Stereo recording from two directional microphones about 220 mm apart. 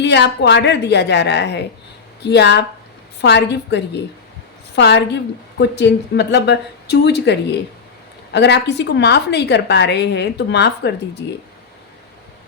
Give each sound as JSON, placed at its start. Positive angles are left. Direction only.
{"t": 0.0, "sound": "a woman's voice", "side_deg": 50}